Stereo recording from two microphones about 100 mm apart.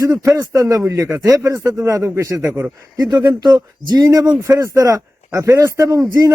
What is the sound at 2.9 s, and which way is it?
Speech, 45° right (ahead or behind).